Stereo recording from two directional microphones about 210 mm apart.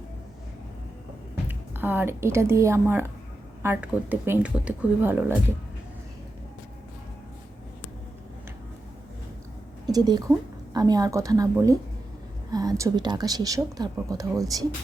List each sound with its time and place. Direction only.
1.5 s speech: 10° right (ahead or behind)
9.8 s a woman's voice: 20° right (ahead or behind)